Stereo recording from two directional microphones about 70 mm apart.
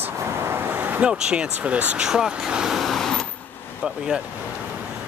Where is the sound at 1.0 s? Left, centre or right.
Centre.